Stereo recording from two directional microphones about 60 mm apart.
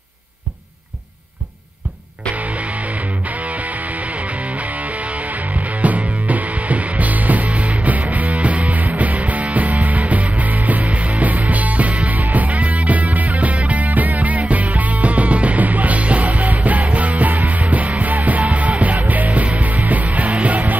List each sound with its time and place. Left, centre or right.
2.3 s music: right